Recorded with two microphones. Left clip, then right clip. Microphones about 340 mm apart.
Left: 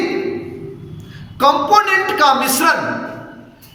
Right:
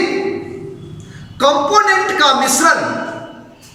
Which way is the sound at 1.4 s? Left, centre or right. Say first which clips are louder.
Even; centre.